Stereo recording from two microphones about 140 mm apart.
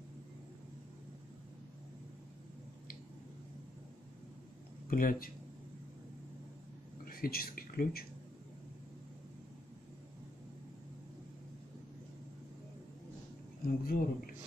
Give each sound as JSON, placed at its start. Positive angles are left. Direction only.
{"t": 4.8, "sound": "speech", "side_deg": 90}
{"t": 7.1, "sound": "speech", "side_deg": 90}
{"t": 13.7, "sound": "speech", "side_deg": 90}